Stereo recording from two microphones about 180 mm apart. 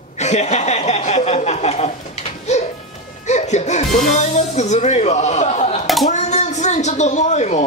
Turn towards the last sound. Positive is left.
turn(degrees=40)  # may be behind; listen again after turning